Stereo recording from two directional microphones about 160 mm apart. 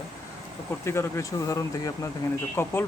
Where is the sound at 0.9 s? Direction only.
15° left (ahead or behind).